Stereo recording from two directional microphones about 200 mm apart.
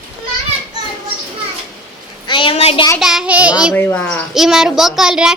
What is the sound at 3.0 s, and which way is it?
Speech, centre (ahead or behind).